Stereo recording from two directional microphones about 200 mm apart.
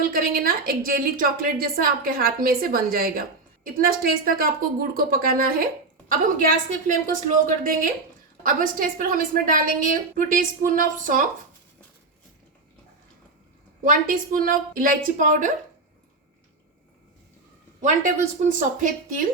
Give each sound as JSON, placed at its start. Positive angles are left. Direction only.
{"t": 0.0, "sound": "a woman's voice", "side_deg": -45}
{"t": 13.8, "sound": "a woman's voice", "side_deg": -45}
{"t": 17.8, "sound": "speech", "side_deg": -40}